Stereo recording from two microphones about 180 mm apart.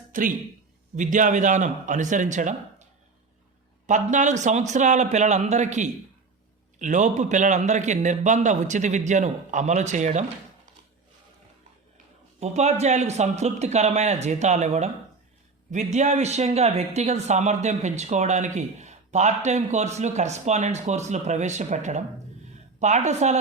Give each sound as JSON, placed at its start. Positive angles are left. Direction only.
{"t": 0.1, "sound": "a man's voice", "side_deg": -45}
{"t": 3.8, "sound": "speech", "side_deg": -45}
{"t": 12.4, "sound": "speech", "side_deg": -40}